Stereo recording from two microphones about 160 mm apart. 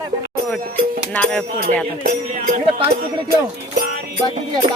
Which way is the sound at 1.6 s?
60° right (ahead or behind).